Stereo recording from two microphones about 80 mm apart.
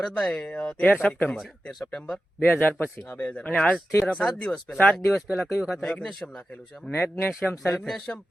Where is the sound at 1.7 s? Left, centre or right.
Centre.